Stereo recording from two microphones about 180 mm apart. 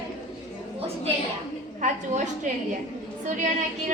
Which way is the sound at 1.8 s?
40° right (ahead or behind).